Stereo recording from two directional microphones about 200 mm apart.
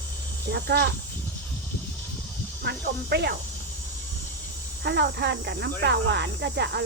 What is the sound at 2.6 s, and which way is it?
Speech, 55° right (ahead or behind).